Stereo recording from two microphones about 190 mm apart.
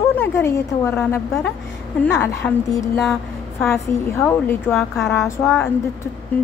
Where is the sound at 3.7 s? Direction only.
10° left (ahead or behind).